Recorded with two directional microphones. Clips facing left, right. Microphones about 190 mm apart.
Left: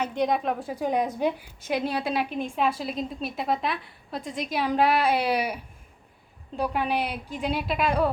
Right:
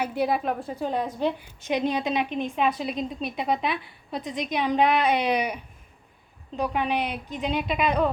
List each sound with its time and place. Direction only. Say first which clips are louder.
0.0 s a woman's voice: even; 5° right (ahead or behind)
0.8 s a woman's voice: left 3 dB; 15° left (ahead or behind)
6.6 s a woman's voice: even; 5° left (ahead or behind)